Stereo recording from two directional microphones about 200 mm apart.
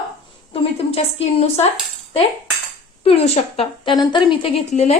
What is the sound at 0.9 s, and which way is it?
Speech, 30° left (ahead or behind).